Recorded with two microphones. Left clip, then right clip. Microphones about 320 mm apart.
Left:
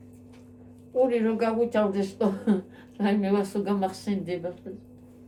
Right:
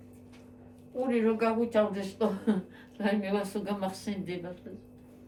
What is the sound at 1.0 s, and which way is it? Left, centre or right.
A woman's voice, left.